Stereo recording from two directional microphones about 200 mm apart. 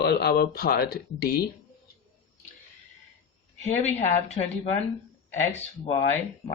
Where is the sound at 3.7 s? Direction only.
35° left (ahead or behind).